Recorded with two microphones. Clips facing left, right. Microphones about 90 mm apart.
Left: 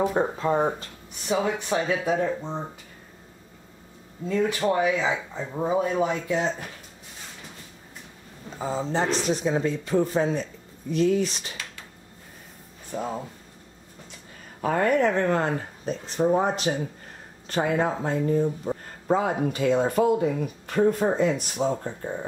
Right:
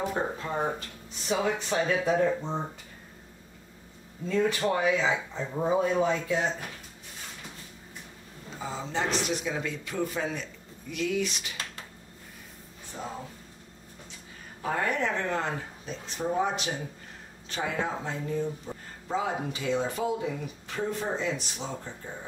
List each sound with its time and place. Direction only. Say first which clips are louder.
0.0 s speech: left 7 dB; 30° left (ahead or behind)
1.3 s speech: left 3 dB; 15° left (ahead or behind)
2.1 s speech: even; 5° right (ahead or behind)
4.6 s speech: left 3 dB; 15° left (ahead or behind)
8.5 s speech: left 6 dB; 40° left (ahead or behind)
14.6 s speech: left 7 dB; 55° left (ahead or behind)